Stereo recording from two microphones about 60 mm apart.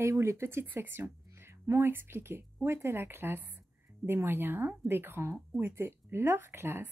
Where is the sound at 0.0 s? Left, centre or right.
Right.